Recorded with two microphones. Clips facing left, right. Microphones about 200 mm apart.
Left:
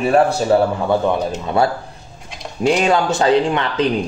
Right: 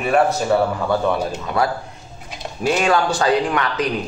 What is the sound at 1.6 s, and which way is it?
Speech, 25° left (ahead or behind).